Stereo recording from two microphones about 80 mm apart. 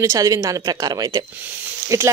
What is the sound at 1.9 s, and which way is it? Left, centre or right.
Speech, right.